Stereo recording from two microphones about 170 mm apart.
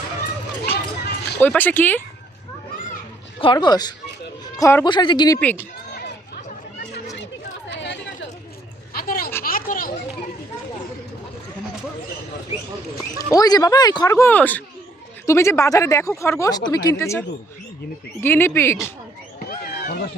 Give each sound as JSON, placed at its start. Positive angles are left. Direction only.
{"t": 0.6, "sound": "a sound", "side_deg": 70}
{"t": 1.4, "sound": "speech", "side_deg": 10}
{"t": 3.4, "sound": "speech", "side_deg": 25}
{"t": 6.0, "sound": "chatter", "side_deg": 70}
{"t": 8.9, "sound": "a sound", "side_deg": 60}
{"t": 9.4, "sound": "children playing", "side_deg": 55}
{"t": 13.1, "sound": "speech", "side_deg": 20}